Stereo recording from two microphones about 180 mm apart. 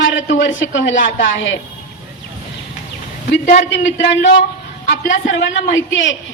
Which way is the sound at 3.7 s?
80° left.